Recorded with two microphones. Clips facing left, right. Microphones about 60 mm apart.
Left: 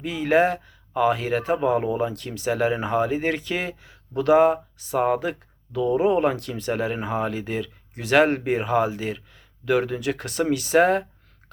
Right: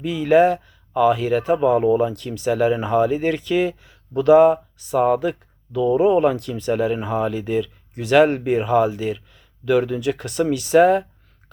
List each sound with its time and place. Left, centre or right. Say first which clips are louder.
0.0 s speech: right 5 dB; left
1.5 s speech: right 7 dB; left